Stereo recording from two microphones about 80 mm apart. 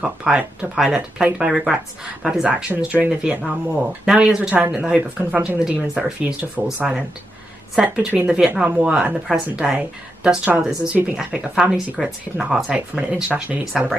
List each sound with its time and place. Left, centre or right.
0.3 s speech: centre
9.3 s speech: centre
12.9 s speech: centre